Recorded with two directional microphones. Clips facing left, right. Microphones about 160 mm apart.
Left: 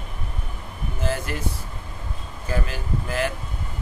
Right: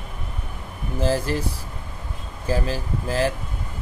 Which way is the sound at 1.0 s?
35° right (ahead or behind).